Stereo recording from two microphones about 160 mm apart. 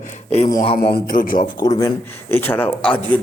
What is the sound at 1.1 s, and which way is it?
Speech, 60° left (ahead or behind).